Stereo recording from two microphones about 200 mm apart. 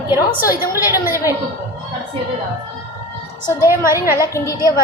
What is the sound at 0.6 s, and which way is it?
Speech, 10° right (ahead or behind).